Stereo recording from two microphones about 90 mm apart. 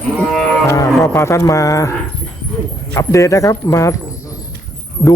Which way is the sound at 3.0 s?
35° left (ahead or behind).